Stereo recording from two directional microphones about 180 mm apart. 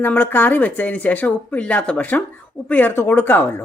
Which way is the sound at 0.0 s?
10° left (ahead or behind).